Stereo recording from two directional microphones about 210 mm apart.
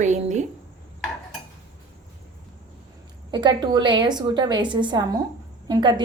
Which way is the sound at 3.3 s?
20° right (ahead or behind).